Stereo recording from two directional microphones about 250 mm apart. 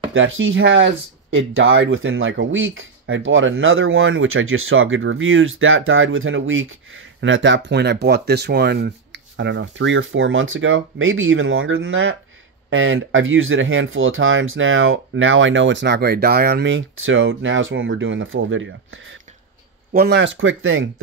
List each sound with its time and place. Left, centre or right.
0.1 s speech: right